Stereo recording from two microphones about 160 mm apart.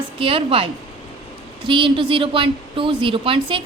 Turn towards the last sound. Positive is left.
turn(degrees=-35)  # may be behind; listen again after turning